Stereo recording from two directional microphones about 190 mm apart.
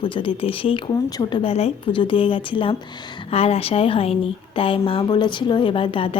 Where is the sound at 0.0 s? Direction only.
25° left (ahead or behind).